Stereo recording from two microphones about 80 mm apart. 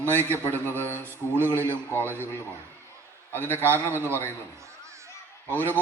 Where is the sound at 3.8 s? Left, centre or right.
Right.